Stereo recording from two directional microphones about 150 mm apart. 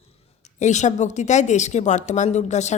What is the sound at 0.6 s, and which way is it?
A woman's voice, 50° left (ahead or behind).